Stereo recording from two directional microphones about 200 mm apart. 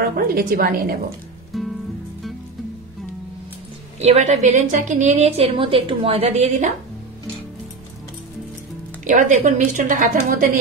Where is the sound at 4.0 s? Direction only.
30° right (ahead or behind).